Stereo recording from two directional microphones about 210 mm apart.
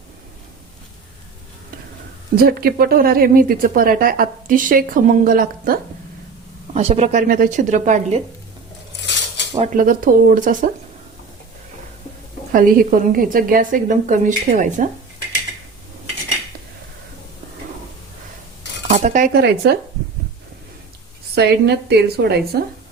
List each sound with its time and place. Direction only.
2.3 s speech: 45° right (ahead or behind)
6.7 s a woman's voice: 30° right (ahead or behind)
9.6 s a woman's voice: 40° right (ahead or behind)
12.5 s a woman's voice: 45° right (ahead or behind)
18.9 s speech: 35° right (ahead or behind)
19.3 s speech: 50° right (ahead or behind)
21.3 s speech: 50° right (ahead or behind)